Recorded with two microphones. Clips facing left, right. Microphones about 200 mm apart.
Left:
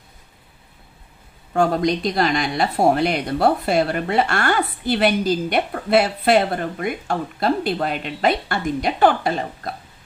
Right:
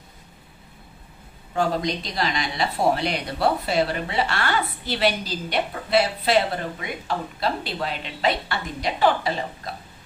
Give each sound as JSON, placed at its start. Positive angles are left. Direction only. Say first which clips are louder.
{"t": 1.5, "sound": "speech", "louder": "left 5 dB", "side_deg": 55}